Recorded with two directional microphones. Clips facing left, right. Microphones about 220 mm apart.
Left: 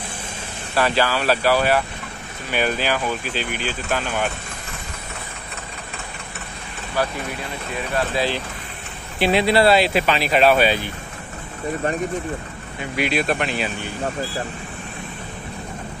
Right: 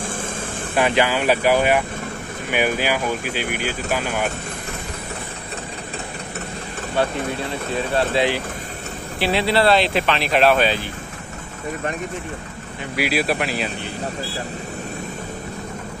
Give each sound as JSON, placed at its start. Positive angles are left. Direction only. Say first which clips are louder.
{"t": 0.7, "sound": "speech", "louder": "right 1 dB", "side_deg": -15}
{"t": 7.0, "sound": "speech", "louder": "right 3 dB", "side_deg": -25}
{"t": 9.2, "sound": "speech", "louder": "left 2 dB", "side_deg": 15}
{"t": 12.9, "sound": "speech", "louder": "even", "side_deg": -5}